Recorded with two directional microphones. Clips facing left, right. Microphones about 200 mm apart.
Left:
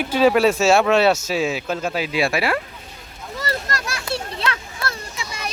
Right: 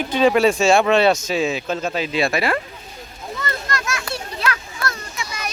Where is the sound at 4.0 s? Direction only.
25° left (ahead or behind).